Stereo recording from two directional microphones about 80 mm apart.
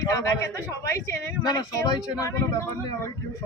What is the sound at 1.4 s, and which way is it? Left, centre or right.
Speech, left.